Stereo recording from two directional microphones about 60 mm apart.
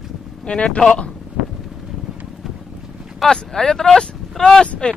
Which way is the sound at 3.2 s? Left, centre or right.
Centre.